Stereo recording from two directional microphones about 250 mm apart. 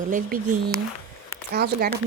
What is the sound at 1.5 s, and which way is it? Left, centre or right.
Speech, right.